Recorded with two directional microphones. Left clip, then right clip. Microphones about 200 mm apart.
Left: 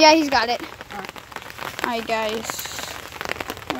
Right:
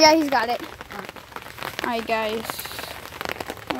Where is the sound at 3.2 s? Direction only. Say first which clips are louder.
Left 1 dB; 15° right (ahead or behind).